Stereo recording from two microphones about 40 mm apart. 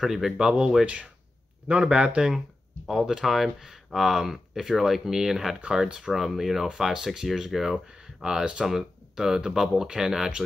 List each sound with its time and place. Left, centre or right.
0.0 s speech: centre
0.8 s speech: right
2.9 s speech: centre
5.6 s speech: right